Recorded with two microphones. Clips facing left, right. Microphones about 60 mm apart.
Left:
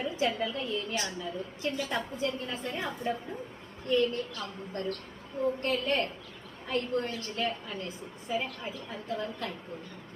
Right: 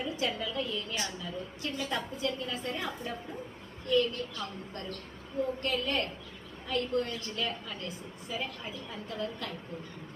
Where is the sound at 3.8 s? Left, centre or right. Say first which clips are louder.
Left 1 dB; left.